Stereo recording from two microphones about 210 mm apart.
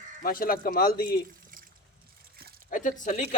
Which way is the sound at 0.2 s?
45° left (ahead or behind).